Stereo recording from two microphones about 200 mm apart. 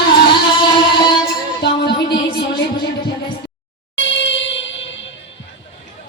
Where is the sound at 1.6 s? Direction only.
55° left (ahead or behind).